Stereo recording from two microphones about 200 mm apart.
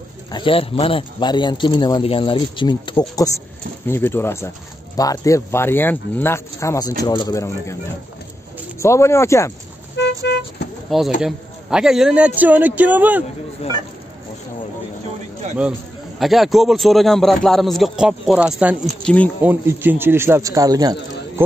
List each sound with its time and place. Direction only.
0.3 s speech: 25° left (ahead or behind)
3.8 s speech: 10° left (ahead or behind)
8.7 s speech: 15° left (ahead or behind)
9.9 s vehicle: 60° left (ahead or behind)
11.1 s a man's voice: 5° right (ahead or behind)
16.2 s a man's voice: centre (ahead or behind)
19.0 s speech: 5° left (ahead or behind)
19.4 s a man's voice: 10° right (ahead or behind)